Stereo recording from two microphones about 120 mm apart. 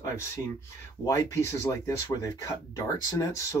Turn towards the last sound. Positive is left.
turn(degrees=30)  # may be behind; listen again after turning